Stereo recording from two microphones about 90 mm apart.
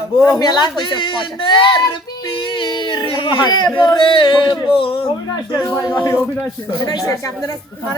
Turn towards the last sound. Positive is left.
turn(degrees=35)  # may be behind; listen again after turning